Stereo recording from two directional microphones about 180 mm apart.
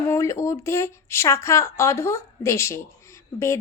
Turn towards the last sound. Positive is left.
turn(degrees=15)  # may be behind; listen again after turning